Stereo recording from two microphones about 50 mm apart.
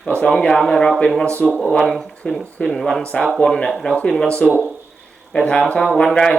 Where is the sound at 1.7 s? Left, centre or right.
Centre.